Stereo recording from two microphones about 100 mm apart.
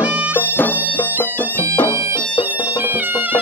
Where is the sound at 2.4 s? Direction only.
20° right (ahead or behind).